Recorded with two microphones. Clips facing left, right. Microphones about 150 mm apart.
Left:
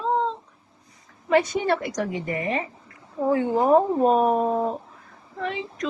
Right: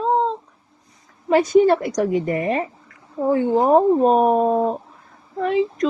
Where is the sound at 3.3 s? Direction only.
30° right (ahead or behind).